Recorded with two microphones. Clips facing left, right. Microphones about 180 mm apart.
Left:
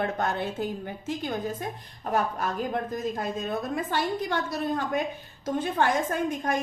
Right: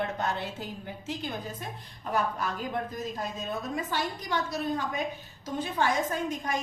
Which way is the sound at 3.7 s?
55° left (ahead or behind).